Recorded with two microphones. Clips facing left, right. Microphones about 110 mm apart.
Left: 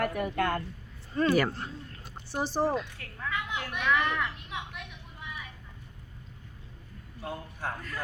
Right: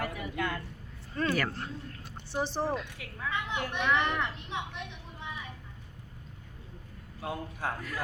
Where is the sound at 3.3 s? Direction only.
30° right (ahead or behind).